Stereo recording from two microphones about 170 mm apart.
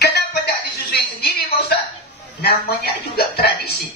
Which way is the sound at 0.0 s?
70° left (ahead or behind).